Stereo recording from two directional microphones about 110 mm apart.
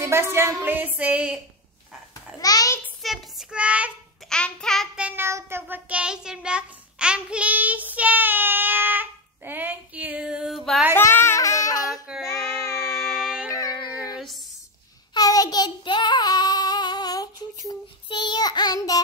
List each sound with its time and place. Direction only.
0.0 s child singing: 25° right (ahead or behind)
2.4 s a sound: 35° left (ahead or behind)
3.0 s child singing: centre (ahead or behind)
4.3 s child singing: 5° left (ahead or behind)
4.9 s child singing: 10° right (ahead or behind)
5.2 s child singing: 20° right (ahead or behind); by 10.8 s centre (ahead or behind)
11.0 s child singing: 20° left (ahead or behind)
12.9 s music: 5° right (ahead or behind)
13.5 s dog: 35° left (ahead or behind)
14.1 s a sound: centre (ahead or behind)
15.1 s child singing: 35° left (ahead or behind)